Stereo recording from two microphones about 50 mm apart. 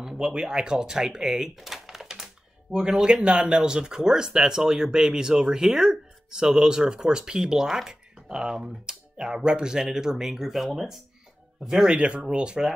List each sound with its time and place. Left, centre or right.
0.0 s speech: centre
2.7 s speech: centre